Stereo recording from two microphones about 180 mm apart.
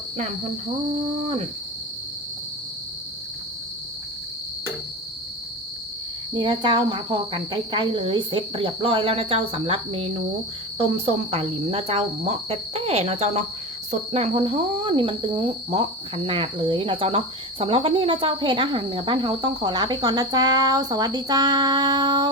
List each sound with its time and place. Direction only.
0.2 s speech: 40° right (ahead or behind)
6.3 s speech: 25° right (ahead or behind)